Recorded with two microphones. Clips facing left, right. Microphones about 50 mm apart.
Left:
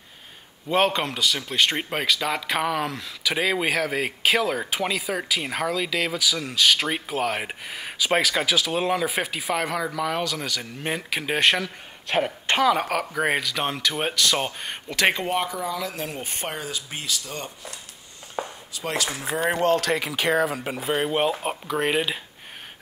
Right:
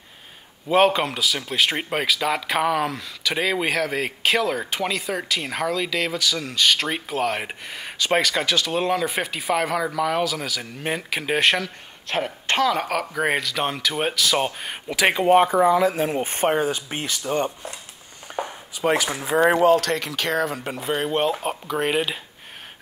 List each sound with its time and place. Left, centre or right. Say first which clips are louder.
0.7 s speech: right 4 dB; centre
15.3 s a sound: right 10 dB; right
18.3 s chopping: right 2 dB; right
19.6 s speech: right 4 dB; centre